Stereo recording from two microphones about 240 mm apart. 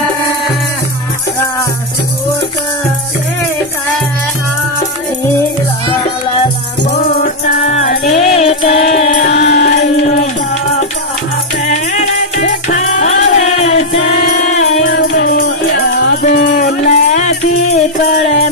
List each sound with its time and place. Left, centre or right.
7.4 s music: left
11.6 s music: left
14.8 s music: left
15.2 s music: left